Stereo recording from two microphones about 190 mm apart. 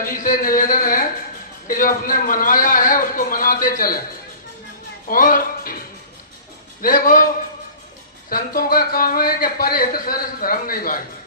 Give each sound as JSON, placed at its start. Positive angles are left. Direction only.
{"t": 0.0, "sound": "speech", "side_deg": 45}
{"t": 5.0, "sound": "speech", "side_deg": 45}
{"t": 6.8, "sound": "speech", "side_deg": 45}
{"t": 8.3, "sound": "speech", "side_deg": 50}